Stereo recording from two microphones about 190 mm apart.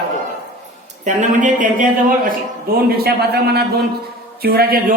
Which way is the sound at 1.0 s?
40° right (ahead or behind).